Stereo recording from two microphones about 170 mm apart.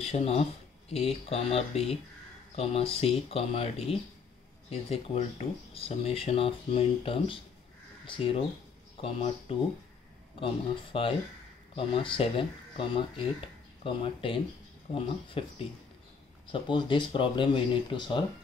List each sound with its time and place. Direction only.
0.0 s speech: 35° left (ahead or behind)
16.5 s speech: 30° left (ahead or behind)